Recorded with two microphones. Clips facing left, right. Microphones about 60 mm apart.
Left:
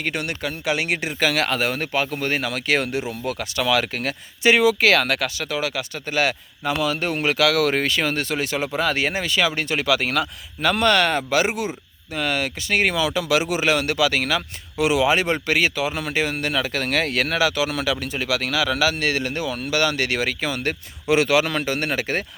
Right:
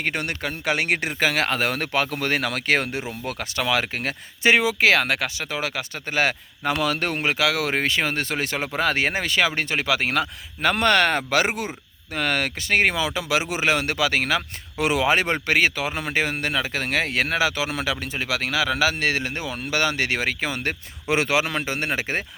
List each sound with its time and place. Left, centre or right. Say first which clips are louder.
0.0 s speech: even; right
1.6 s speech: even; right
6.7 s a man's voice: left 2 dB; right
7.2 s speech: left 6 dB; right